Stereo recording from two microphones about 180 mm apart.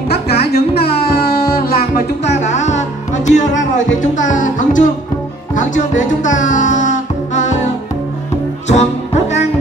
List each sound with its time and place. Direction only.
0.1 s music: 65° left (ahead or behind)
2.2 s music: 40° left (ahead or behind)
8.6 s music: 40° left (ahead or behind)